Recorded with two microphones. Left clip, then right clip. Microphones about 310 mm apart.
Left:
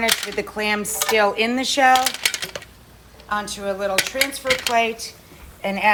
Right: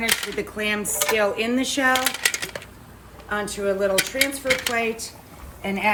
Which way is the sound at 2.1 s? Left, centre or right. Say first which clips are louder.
Left 1 dB; centre.